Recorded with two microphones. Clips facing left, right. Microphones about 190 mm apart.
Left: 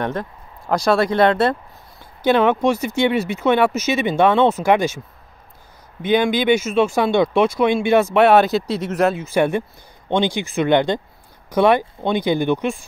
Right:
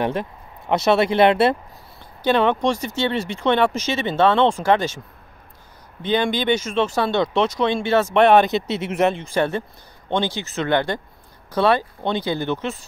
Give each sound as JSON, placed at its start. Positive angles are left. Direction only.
{"t": 0.9, "sound": "speech", "side_deg": -25}
{"t": 1.3, "sound": "speech", "side_deg": -5}
{"t": 2.2, "sound": "speech", "side_deg": 10}
{"t": 6.0, "sound": "speech", "side_deg": 10}